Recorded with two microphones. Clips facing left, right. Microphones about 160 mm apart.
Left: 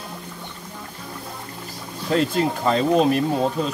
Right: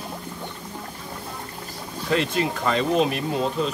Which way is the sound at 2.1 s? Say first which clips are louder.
Left 3 dB; 40° left (ahead or behind).